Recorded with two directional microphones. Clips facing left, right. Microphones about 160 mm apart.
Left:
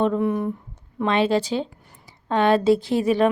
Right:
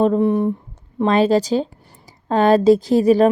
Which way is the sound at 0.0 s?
35° right (ahead or behind).